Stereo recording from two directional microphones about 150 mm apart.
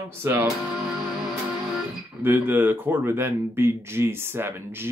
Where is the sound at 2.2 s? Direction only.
15° right (ahead or behind).